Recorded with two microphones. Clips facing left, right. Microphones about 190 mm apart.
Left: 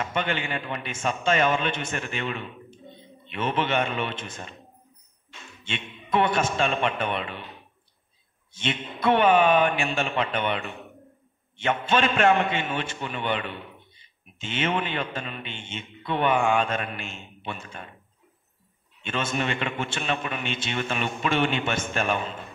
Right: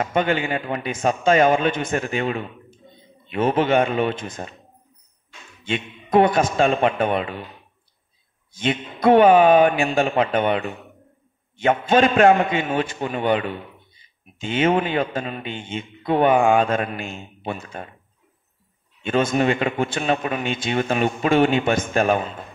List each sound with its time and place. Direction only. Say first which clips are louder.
0.0 s a man's voice: right 7 dB; 45° right (ahead or behind)
5.7 s a man's voice: right 7 dB; 40° right (ahead or behind)
8.6 s a man's voice: right 7 dB; 40° right (ahead or behind)
19.0 s a man's voice: right 9 dB; 40° right (ahead or behind)